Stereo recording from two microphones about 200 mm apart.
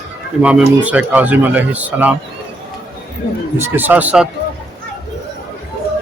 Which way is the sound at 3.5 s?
10° right (ahead or behind).